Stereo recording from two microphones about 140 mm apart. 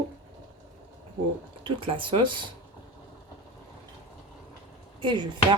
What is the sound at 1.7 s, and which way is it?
Speech, 40° right (ahead or behind).